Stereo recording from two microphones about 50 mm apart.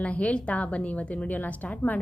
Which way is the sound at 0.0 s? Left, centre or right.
Left.